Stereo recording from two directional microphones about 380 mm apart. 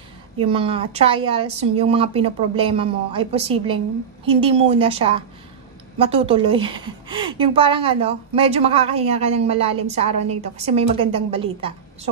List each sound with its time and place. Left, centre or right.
0.4 s speech: centre